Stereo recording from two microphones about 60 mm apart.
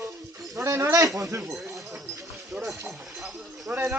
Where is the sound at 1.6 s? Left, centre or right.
Right.